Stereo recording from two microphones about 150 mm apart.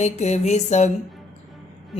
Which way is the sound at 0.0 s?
50° left (ahead or behind).